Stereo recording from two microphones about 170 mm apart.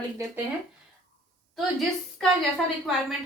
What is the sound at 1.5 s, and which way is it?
Speech, centre (ahead or behind).